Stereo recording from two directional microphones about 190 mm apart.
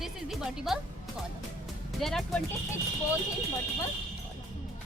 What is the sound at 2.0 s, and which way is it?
Speech, centre (ahead or behind).